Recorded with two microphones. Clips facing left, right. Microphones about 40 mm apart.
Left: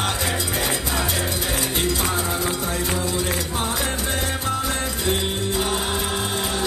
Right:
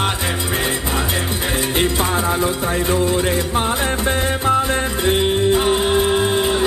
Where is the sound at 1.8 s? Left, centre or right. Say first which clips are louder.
Right 6 dB; right.